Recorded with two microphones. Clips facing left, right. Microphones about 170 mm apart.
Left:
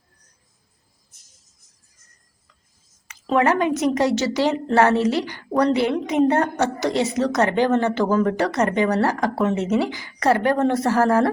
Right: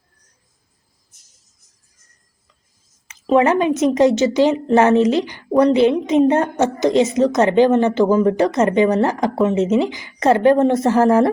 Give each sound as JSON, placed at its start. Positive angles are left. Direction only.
{"t": 3.1, "sound": "a woman's voice", "side_deg": -20}